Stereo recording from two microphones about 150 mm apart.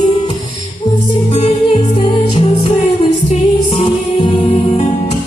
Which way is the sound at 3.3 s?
45° left (ahead or behind).